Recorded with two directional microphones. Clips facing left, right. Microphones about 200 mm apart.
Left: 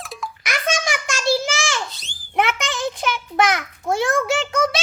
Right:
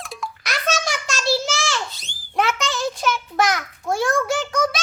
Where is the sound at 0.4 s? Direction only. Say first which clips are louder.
Left 1 dB; 15° left (ahead or behind).